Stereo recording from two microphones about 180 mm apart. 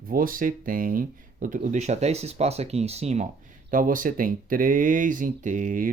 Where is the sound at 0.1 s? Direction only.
50° right (ahead or behind); by 3.2 s 35° right (ahead or behind).